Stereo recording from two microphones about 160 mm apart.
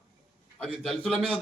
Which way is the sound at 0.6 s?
5° left (ahead or behind).